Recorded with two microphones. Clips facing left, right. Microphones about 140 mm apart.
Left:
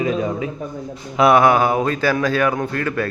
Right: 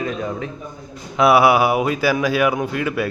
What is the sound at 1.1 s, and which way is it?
A man's voice, 5° right (ahead or behind).